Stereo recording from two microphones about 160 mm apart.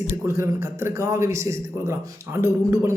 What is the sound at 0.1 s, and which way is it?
A man's voice, 15° right (ahead or behind).